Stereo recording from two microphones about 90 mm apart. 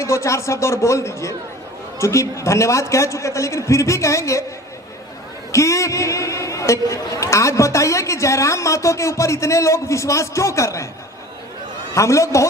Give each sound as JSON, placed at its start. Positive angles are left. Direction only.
{"t": 0.0, "sound": "a man's voice", "side_deg": 35}
{"t": 5.5, "sound": "a man's voice", "side_deg": 35}
{"t": 11.9, "sound": "a man's voice", "side_deg": 35}